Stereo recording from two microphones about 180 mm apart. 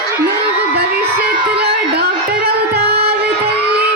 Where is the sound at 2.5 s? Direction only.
65° right (ahead or behind).